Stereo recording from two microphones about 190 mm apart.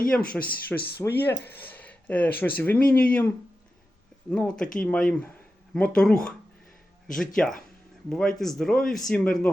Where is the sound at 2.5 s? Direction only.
10° left (ahead or behind).